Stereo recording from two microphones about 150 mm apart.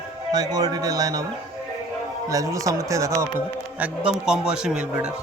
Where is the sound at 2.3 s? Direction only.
20° right (ahead or behind).